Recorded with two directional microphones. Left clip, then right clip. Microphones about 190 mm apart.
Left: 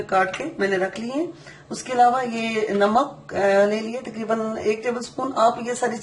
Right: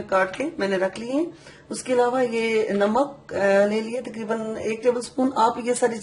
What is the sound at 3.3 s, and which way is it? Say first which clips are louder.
Speech: left 1 dB; 50° right (ahead or behind).